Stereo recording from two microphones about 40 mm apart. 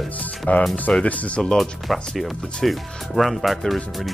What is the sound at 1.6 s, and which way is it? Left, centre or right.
Speech, centre.